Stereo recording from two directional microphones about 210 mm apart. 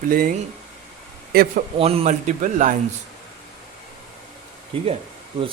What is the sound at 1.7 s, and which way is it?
Speech, 30° right (ahead or behind).